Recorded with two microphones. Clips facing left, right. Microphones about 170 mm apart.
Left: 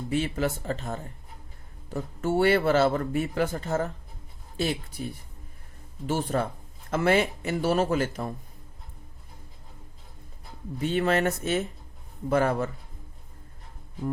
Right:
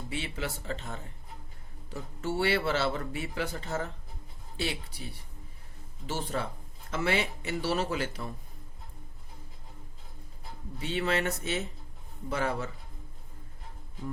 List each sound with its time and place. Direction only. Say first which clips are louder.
0.1 s speech: left 10 dB; 45° left (ahead or behind)
10.8 s speech: left 6 dB; 50° left (ahead or behind)